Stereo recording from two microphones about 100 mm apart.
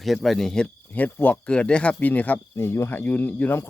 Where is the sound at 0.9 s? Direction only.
20° left (ahead or behind).